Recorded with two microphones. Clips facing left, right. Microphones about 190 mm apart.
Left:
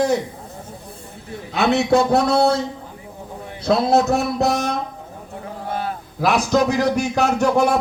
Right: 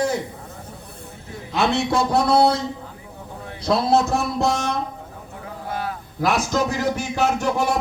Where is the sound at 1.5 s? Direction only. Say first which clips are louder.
Left 4 dB; 65° left (ahead or behind).